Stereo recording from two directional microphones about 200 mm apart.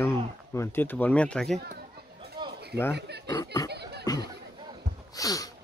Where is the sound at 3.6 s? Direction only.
55° right (ahead or behind).